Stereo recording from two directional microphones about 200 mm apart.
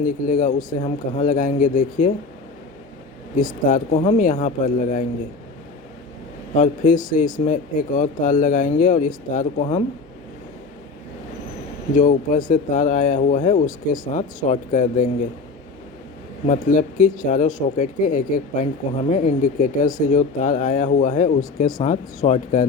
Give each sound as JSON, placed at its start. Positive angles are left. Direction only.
{"t": 0.0, "sound": "speech", "side_deg": 40}
{"t": 3.6, "sound": "speech", "side_deg": 40}
{"t": 6.5, "sound": "speech", "side_deg": 40}
{"t": 11.9, "sound": "speech", "side_deg": 40}
{"t": 16.5, "sound": "speech", "side_deg": 40}